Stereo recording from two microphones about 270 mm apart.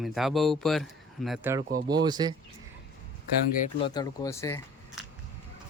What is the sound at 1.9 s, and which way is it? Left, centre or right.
Speech, centre.